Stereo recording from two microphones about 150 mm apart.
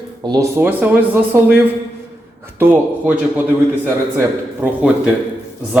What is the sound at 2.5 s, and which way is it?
Speech, 15° right (ahead or behind).